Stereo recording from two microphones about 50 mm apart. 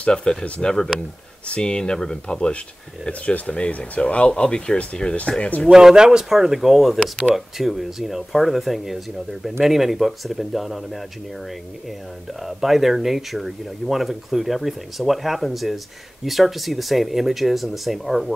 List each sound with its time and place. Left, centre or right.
0.0 s speech: centre
5.7 s speech: centre
12.4 s speech: centre